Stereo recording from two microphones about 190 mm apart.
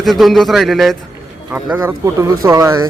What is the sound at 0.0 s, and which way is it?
Speech, centre (ahead or behind).